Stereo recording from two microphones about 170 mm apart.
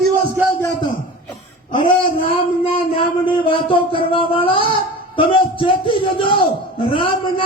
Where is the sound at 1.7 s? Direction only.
30° left (ahead or behind).